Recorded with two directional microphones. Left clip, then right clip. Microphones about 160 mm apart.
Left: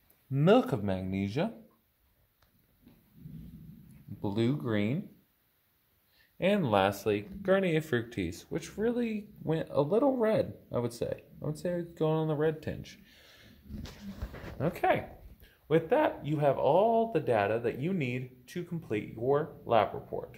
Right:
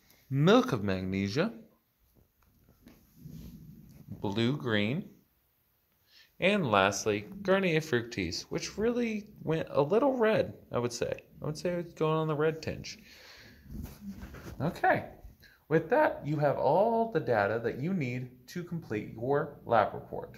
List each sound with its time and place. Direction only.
0.3 s speech: 15° left (ahead or behind)
4.2 s speech: 20° left (ahead or behind)
6.3 s speech: 25° left (ahead or behind)
14.6 s speech: 25° left (ahead or behind)